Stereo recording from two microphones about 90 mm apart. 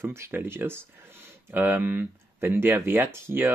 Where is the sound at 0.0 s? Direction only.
30° right (ahead or behind).